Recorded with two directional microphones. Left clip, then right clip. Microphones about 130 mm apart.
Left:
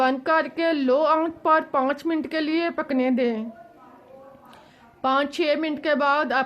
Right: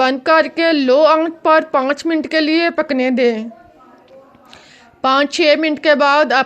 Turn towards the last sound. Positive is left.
turn(degrees=-30)  # may be behind; listen again after turning